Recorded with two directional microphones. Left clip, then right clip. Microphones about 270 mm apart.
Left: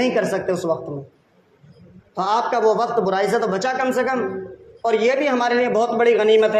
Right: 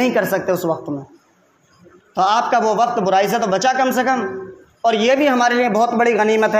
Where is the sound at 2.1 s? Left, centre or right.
Right.